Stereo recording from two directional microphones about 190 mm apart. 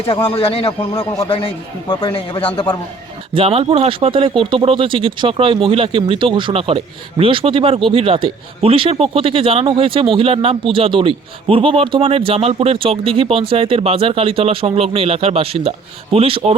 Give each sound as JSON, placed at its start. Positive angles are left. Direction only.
{"t": 0.1, "sound": "a man's voice", "side_deg": 25}
{"t": 3.3, "sound": "speech", "side_deg": -30}